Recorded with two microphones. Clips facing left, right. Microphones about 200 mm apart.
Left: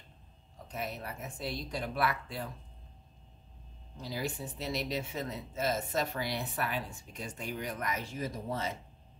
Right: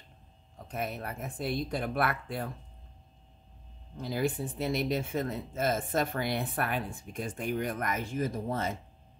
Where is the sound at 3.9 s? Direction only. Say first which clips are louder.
Right 6 dB; 55° right (ahead or behind).